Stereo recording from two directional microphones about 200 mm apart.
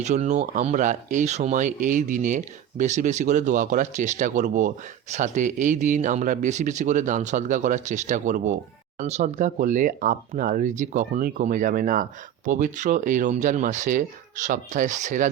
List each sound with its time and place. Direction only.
0.0 s speech: 35° right (ahead or behind)